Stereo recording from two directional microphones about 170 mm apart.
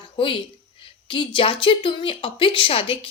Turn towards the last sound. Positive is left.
turn(degrees=35)  # may be behind; listen again after turning